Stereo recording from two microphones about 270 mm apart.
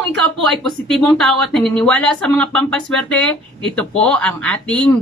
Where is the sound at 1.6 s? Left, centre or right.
Centre.